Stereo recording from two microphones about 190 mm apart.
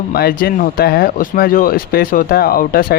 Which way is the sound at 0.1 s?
50° left (ahead or behind).